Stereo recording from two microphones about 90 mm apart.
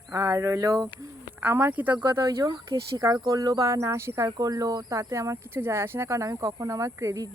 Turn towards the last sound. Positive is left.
turn(degrees=-35)  # may be behind; listen again after turning